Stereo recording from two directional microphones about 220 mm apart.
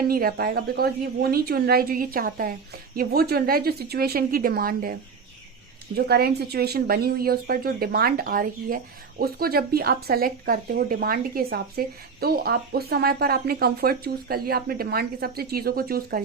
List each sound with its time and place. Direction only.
0.1 s speech: 45° right (ahead or behind)
6.1 s speech: 45° right (ahead or behind)